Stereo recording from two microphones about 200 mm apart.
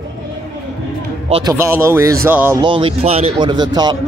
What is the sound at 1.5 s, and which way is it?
Speech, 10° right (ahead or behind).